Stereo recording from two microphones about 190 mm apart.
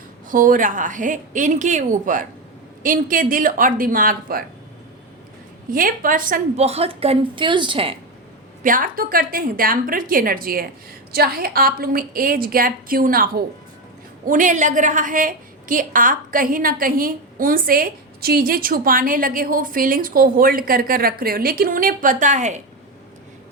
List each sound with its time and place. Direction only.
0.3 s a woman's voice: 45° right (ahead or behind)
5.7 s a woman's voice: 45° right (ahead or behind)
6.6 s a woman's voice: 35° right (ahead or behind)
8.6 s a woman's voice: 45° right (ahead or behind)